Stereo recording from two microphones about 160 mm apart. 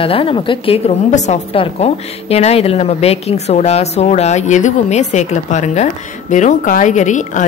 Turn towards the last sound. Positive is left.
turn(degrees=50)  # may be behind; listen again after turning